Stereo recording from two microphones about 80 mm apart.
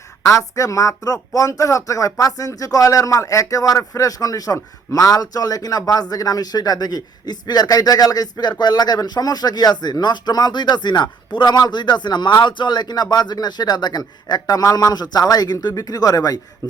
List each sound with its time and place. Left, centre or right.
0.3 s speech: left